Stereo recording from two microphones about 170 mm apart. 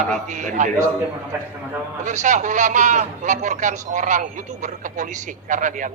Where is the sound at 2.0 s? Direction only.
45° right (ahead or behind).